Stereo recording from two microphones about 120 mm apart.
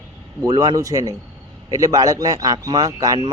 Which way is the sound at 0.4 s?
35° right (ahead or behind).